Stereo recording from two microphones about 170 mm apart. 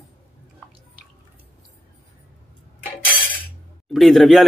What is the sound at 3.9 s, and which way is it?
Speech, centre (ahead or behind).